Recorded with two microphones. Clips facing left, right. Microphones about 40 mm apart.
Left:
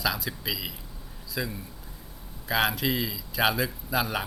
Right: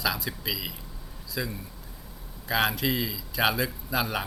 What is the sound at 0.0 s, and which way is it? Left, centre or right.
Speech, centre.